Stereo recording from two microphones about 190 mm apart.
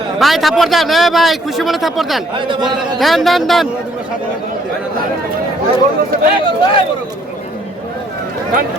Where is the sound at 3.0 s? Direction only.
Centre (ahead or behind).